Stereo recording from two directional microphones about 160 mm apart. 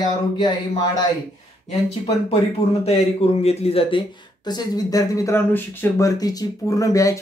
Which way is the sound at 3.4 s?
40° left (ahead or behind).